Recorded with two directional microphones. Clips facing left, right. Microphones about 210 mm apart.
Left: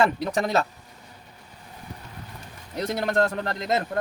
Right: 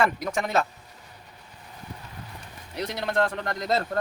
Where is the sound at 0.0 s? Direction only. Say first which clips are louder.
Left 3 dB; 30° left (ahead or behind).